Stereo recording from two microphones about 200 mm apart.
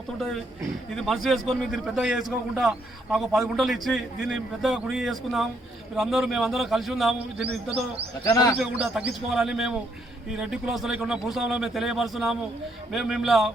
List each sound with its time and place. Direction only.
0.9 s a man's voice: centre (ahead or behind)
8.2 s a man's voice: 15° left (ahead or behind)
8.5 s a man's voice: centre (ahead or behind)